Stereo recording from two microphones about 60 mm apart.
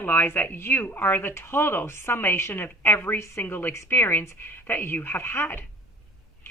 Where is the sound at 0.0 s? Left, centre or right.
Left.